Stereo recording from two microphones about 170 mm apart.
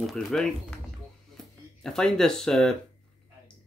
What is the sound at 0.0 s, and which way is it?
Speech, centre (ahead or behind).